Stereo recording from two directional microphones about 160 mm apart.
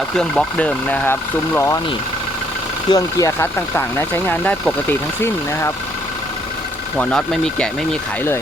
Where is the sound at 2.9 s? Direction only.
20° left (ahead or behind).